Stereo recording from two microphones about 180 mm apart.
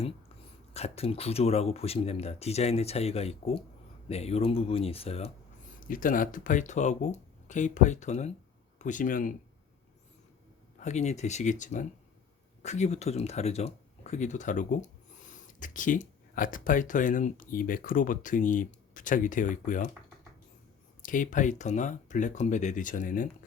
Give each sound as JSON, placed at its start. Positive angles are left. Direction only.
{"t": 0.7, "sound": "speech", "side_deg": 35}
{"t": 5.8, "sound": "speech", "side_deg": 50}
{"t": 10.8, "sound": "speech", "side_deg": 40}
{"t": 21.0, "sound": "speech", "side_deg": 45}